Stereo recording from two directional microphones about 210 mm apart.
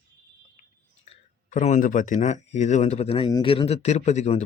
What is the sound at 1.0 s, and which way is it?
Speech, 35° left (ahead or behind).